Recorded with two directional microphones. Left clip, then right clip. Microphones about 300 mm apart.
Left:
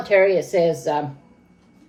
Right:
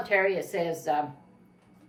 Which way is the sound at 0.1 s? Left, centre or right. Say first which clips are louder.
Left 10 dB; centre.